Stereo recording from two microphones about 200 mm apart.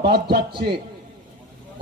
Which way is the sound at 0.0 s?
50° right (ahead or behind).